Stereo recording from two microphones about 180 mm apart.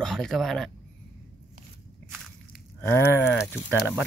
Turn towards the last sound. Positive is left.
turn(degrees=-5)  # may be behind; listen again after turning